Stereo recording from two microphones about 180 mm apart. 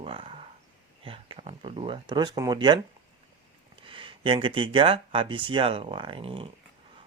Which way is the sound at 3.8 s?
30° right (ahead or behind).